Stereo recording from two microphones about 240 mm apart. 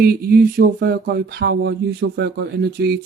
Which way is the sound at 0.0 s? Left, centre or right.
Right.